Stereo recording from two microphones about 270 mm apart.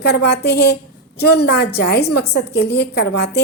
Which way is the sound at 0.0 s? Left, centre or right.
Left.